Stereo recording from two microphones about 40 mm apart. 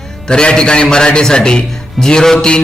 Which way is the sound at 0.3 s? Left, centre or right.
Left.